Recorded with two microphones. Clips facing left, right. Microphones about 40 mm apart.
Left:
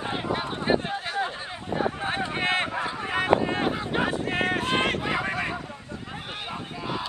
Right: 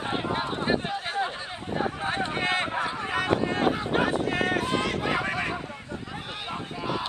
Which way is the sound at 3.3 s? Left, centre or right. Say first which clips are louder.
Left 1 dB; centre.